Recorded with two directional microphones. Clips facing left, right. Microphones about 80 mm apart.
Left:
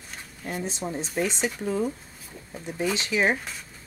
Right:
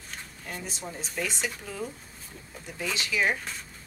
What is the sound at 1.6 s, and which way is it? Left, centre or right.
Speech, left.